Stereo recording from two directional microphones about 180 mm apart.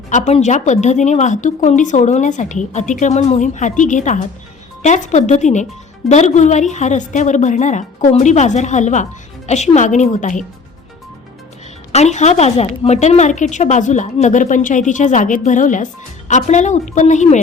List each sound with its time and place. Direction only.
0.1 s a woman's voice: 40° left (ahead or behind)
11.9 s a woman's voice: 40° left (ahead or behind)